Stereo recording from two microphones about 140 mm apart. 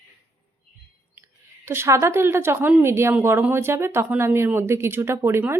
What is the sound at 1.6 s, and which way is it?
A woman's voice, 15° right (ahead or behind).